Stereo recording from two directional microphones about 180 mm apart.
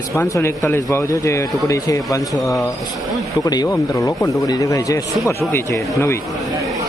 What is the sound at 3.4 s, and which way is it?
Speech, 20° left (ahead or behind).